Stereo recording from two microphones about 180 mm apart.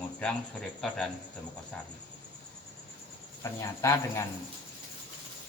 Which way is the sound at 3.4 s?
15° left (ahead or behind).